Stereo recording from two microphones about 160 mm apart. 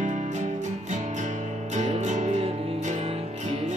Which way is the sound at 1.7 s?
50° right (ahead or behind).